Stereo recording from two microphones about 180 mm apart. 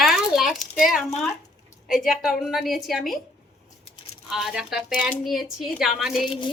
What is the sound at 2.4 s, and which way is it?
Speech, centre (ahead or behind).